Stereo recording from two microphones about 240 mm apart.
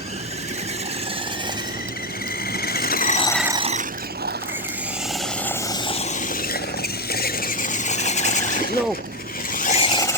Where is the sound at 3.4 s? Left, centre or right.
Right.